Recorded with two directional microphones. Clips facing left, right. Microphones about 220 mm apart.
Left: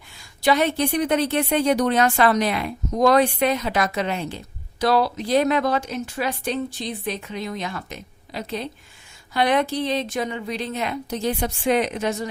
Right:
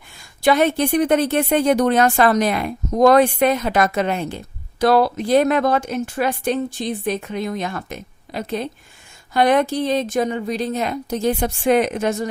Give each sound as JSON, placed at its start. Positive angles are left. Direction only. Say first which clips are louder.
{"t": 0.2, "sound": "a woman's voice", "louder": "right 4 dB", "side_deg": -50}